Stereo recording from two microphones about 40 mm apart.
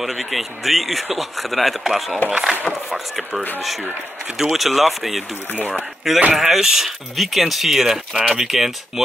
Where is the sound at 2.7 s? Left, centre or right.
Left.